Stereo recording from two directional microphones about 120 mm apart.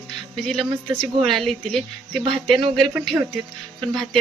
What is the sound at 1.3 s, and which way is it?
A woman's voice, 5° left (ahead or behind).